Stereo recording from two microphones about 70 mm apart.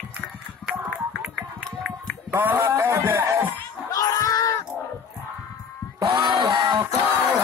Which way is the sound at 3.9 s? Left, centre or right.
Left.